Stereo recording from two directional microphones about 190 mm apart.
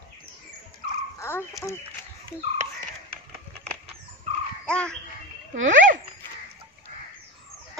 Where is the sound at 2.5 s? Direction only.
35° right (ahead or behind).